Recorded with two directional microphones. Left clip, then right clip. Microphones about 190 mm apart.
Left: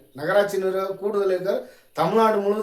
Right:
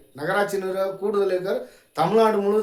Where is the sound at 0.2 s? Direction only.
25° right (ahead or behind).